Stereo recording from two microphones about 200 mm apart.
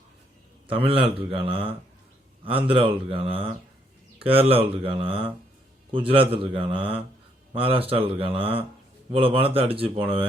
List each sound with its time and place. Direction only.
0.7 s speech: 25° right (ahead or behind)
2.6 s speech: 25° right (ahead or behind)